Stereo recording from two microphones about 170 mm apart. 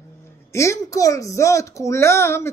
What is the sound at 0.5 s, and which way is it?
Speech, 20° left (ahead or behind).